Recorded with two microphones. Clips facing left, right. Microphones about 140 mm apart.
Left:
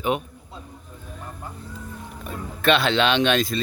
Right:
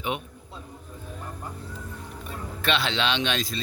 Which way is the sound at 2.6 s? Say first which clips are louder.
Left 7 dB; 55° left (ahead or behind).